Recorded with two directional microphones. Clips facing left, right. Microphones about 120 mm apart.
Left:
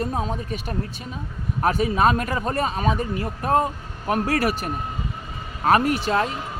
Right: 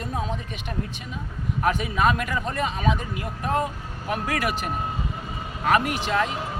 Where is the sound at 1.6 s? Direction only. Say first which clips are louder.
Left 3 dB; 35° left (ahead or behind).